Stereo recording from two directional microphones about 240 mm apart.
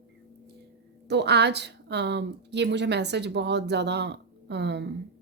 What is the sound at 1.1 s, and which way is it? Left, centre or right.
A woman's voice, right.